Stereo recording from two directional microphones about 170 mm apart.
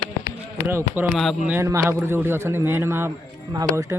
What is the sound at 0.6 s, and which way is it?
A man's voice, 15° right (ahead or behind).